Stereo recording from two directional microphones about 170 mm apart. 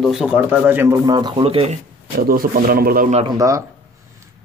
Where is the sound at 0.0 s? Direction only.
Centre (ahead or behind); by 1.8 s 35° right (ahead or behind).